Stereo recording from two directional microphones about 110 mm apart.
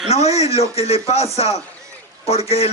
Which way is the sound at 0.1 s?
75° left (ahead or behind).